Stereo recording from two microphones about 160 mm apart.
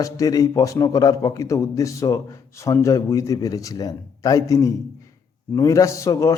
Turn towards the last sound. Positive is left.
turn(degrees=20)  # may be behind; listen again after turning